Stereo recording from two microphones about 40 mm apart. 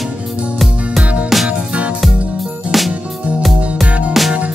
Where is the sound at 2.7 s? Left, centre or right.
Centre.